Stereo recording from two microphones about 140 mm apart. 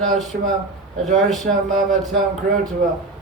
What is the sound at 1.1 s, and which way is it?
Speech, centre (ahead or behind).